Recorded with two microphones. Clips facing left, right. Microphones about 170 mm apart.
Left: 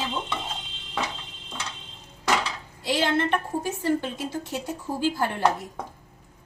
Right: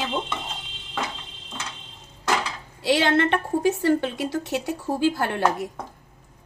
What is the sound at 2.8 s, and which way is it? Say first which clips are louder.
A woman's voice: right 4 dB; 75° right (ahead or behind).